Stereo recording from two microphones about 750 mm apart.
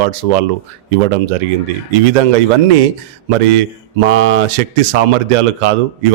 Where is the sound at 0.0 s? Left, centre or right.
Right.